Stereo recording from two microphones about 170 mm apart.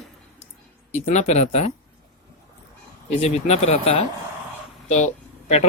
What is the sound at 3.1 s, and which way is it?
Speech, 40° left (ahead or behind).